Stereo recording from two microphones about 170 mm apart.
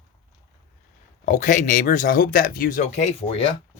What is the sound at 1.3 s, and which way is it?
Speech, 45° left (ahead or behind).